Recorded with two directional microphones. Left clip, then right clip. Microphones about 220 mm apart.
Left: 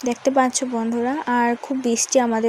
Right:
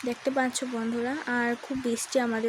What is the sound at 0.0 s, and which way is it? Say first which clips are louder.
Speech: left 9 dB; 25° left (ahead or behind).